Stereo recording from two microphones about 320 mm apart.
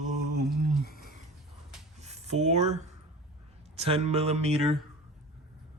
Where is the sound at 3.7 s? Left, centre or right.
Centre.